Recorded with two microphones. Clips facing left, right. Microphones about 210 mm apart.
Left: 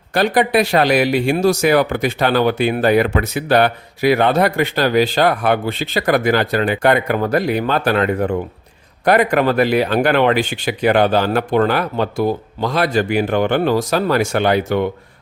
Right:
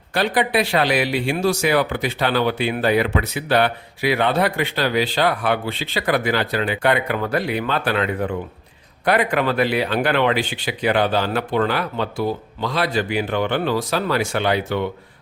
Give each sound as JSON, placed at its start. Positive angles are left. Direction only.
{"t": 0.1, "sound": "speech", "side_deg": 45}